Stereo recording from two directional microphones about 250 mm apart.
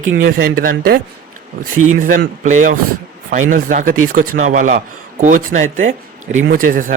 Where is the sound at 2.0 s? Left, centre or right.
Right.